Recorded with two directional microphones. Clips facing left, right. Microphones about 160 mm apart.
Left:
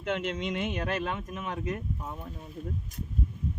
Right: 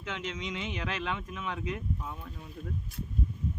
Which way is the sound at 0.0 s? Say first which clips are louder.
Left 6 dB; 60° left (ahead or behind).